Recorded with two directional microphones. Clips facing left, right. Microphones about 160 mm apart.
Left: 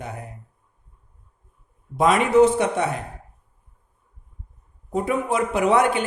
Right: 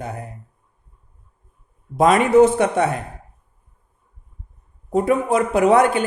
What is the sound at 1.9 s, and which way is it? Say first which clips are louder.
Speech: right 3 dB; 45° right (ahead or behind).